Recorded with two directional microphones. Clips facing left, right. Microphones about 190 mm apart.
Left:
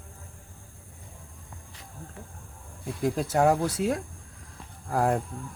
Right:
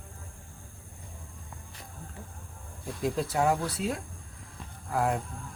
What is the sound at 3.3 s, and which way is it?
Speech, 45° left (ahead or behind).